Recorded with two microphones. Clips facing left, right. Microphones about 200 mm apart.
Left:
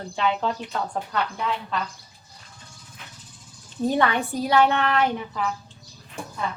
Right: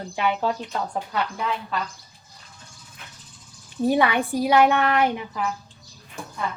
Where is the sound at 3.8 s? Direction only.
10° right (ahead or behind).